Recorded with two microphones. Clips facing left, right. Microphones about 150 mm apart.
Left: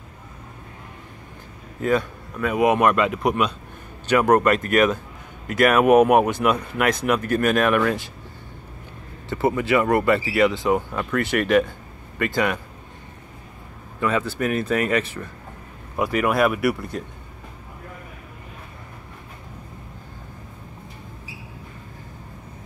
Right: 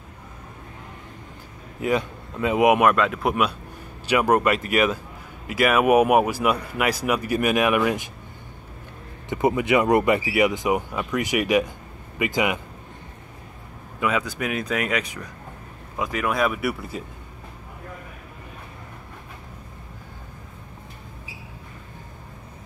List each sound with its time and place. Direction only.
1.8 s speech: 15° right (ahead or behind)
2.8 s speech: centre (ahead or behind)
9.3 s speech: 15° right (ahead or behind)
13.9 s speech: 10° right (ahead or behind)